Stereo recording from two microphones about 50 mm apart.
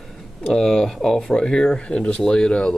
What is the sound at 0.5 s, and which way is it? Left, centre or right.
Speech, centre.